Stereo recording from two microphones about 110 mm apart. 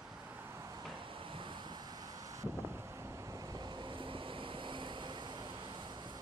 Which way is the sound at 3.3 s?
35° right (ahead or behind).